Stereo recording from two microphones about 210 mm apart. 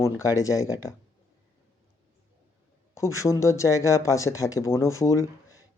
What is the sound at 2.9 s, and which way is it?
Speech, 15° left (ahead or behind).